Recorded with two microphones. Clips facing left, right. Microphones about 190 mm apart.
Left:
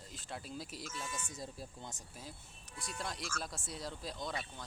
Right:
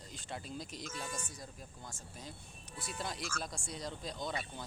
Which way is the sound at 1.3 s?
25° left (ahead or behind).